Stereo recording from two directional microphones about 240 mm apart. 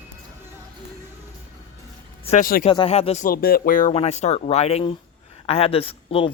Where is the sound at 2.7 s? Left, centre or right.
Left.